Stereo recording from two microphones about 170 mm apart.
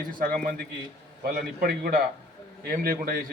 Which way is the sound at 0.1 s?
60° right (ahead or behind).